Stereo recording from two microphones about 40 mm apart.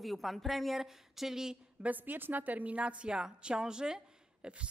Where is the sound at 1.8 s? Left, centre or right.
Right; by 4.5 s centre.